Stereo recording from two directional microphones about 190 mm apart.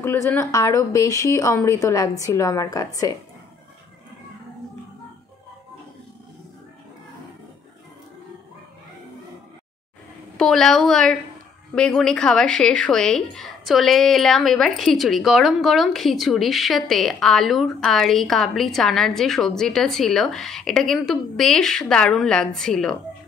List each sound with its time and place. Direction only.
0.0 s speech: 10° left (ahead or behind)
10.3 s speech: 5° left (ahead or behind)